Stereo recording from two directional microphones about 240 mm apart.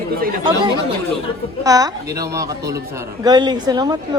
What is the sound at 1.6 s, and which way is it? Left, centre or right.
Speech, centre.